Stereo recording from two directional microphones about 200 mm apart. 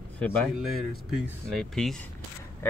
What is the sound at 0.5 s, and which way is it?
Speech, centre (ahead or behind).